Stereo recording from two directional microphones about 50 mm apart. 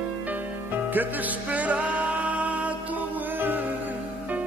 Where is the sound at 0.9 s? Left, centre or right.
Right.